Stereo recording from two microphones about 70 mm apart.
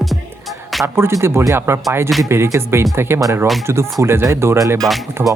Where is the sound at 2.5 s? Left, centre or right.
Right.